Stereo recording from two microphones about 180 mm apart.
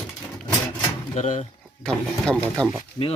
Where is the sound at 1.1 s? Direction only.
40° left (ahead or behind).